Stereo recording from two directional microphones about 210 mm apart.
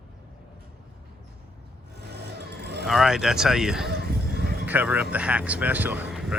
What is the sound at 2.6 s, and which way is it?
Vehicle, 50° right (ahead or behind).